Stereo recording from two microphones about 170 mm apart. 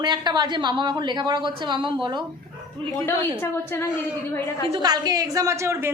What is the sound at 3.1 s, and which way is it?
Speech, 15° left (ahead or behind).